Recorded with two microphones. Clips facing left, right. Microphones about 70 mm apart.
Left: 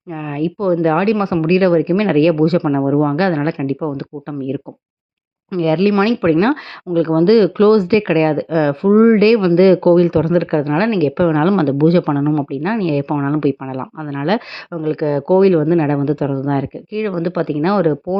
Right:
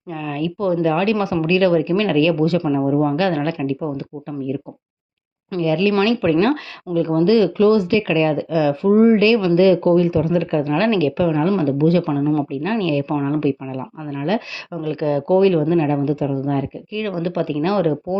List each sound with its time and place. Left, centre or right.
0.1 s speech: left
5.5 s speech: left
6.9 s speech: left
10.8 s speech: left
11.5 s speech: left
12.1 s speech: left
14.8 s speech: left
17.0 s speech: left